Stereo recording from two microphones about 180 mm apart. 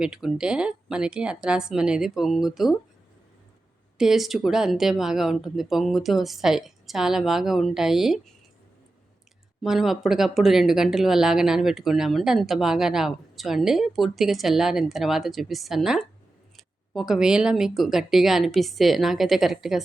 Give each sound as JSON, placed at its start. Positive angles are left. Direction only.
{"t": 0.0, "sound": "speech", "side_deg": -5}
{"t": 3.9, "sound": "speech", "side_deg": 0}
{"t": 9.6, "sound": "speech", "side_deg": 0}